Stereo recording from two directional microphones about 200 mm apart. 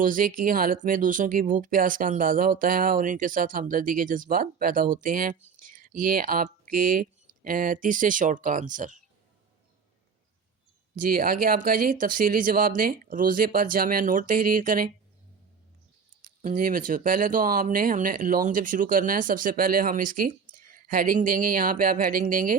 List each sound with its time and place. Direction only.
0.0 s speech: 40° right (ahead or behind)
10.9 s speech: 45° right (ahead or behind)
16.4 s speech: 40° right (ahead or behind)